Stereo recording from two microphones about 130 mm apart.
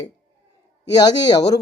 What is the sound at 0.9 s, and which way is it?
Speech, 30° left (ahead or behind).